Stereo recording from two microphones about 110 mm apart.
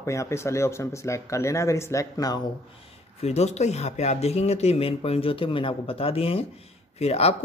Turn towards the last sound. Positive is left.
turn(degrees=70)  # may be behind; listen again after turning